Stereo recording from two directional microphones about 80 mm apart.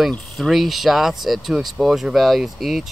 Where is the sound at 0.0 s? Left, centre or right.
Centre.